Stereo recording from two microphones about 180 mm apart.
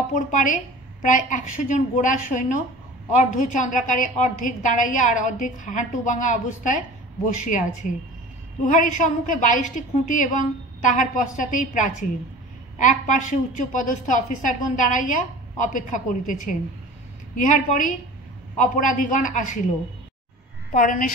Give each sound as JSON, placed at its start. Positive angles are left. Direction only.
{"t": 0.1, "sound": "a woman's voice", "side_deg": 45}
{"t": 8.6, "sound": "a woman's voice", "side_deg": 45}
{"t": 20.7, "sound": "a woman's voice", "side_deg": 45}